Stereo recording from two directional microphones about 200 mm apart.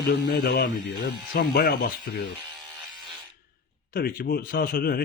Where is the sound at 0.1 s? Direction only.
55° left (ahead or behind).